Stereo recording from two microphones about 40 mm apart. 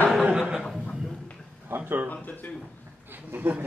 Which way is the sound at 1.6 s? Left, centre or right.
Right.